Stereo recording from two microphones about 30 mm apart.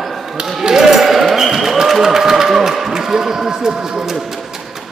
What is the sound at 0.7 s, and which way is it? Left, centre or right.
Basketball bounce, centre.